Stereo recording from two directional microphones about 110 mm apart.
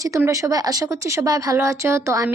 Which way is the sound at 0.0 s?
30° right (ahead or behind).